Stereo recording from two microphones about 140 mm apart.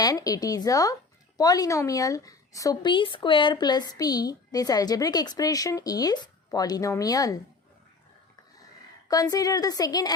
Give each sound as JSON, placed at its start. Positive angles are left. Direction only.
{"t": 0.0, "sound": "speech", "side_deg": 25}
{"t": 9.0, "sound": "speech", "side_deg": 25}